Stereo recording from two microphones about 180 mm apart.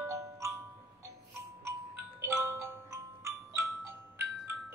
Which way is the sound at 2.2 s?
15° right (ahead or behind).